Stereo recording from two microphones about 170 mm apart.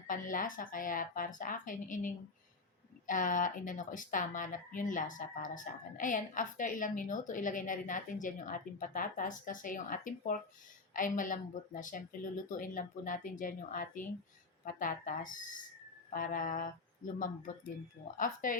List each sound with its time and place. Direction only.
0.1 s speech: 50° left (ahead or behind)